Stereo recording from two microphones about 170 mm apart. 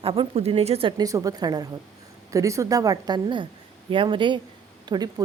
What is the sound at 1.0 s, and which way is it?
Speech, 20° right (ahead or behind).